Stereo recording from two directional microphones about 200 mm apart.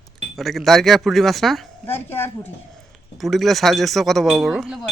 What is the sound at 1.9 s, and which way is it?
Speech, 10° left (ahead or behind).